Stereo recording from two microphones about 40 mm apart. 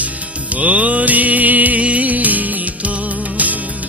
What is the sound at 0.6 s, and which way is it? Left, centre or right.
Music, right.